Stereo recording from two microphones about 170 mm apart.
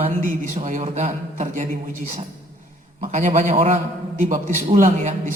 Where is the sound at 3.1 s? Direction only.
45° right (ahead or behind).